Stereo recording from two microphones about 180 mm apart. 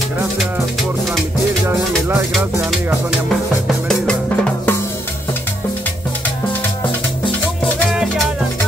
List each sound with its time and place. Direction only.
3.9 s drum: 5° left (ahead or behind)
7.9 s music: centre (ahead or behind)